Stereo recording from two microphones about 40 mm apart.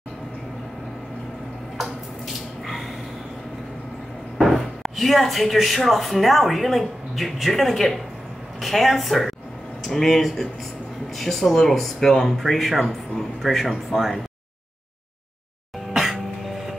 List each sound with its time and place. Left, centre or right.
4.4 s speech: centre
15.9 s music: centre